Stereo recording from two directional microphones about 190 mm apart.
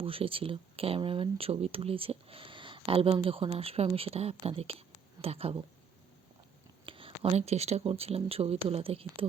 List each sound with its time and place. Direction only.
0.0 s speech: 30° right (ahead or behind)
6.8 s speech: 30° right (ahead or behind)